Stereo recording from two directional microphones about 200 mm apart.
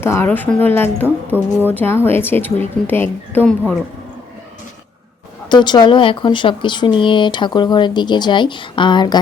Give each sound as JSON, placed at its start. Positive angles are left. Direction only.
{"t": 0.0, "sound": "a woman's voice", "side_deg": 10}
{"t": 1.0, "sound": "a woman's voice", "side_deg": -10}
{"t": 1.6, "sound": "a woman's voice", "side_deg": 10}
{"t": 5.5, "sound": "speech", "side_deg": 20}